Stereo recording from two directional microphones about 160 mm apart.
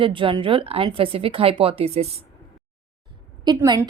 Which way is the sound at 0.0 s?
30° right (ahead or behind).